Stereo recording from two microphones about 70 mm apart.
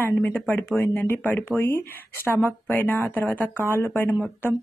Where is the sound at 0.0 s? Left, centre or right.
Left.